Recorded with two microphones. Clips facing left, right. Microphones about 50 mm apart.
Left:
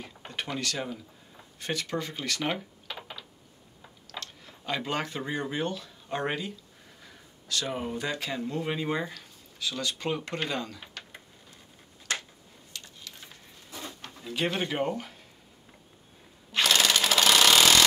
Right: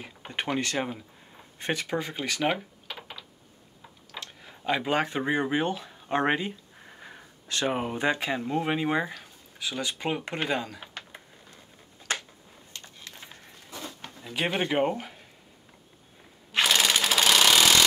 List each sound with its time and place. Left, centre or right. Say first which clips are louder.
0.0 s speech: right 4 dB; right
1.6 s speech: right 3 dB; right
4.1 s speech: even; centre
12.7 s a sound: even; right
14.0 s speech: even; centre
16.5 s sewing machine: right 1 dB; centre